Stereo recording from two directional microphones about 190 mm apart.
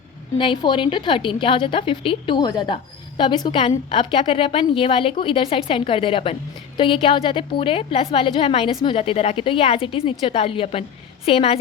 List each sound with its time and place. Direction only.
0.3 s a woman's voice: 25° left (ahead or behind)